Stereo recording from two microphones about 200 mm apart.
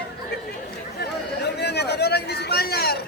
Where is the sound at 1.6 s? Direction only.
55° left (ahead or behind).